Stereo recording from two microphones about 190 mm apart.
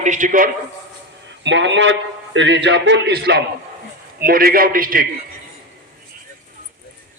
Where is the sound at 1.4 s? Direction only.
70° right (ahead or behind); by 5.0 s 50° right (ahead or behind).